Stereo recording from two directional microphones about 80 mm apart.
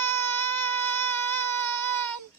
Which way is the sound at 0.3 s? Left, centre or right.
Left.